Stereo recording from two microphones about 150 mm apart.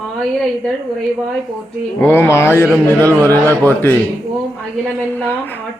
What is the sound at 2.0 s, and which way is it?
Speech, 15° left (ahead or behind).